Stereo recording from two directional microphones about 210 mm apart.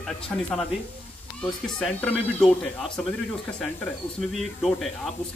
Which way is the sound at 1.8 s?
Centre (ahead or behind).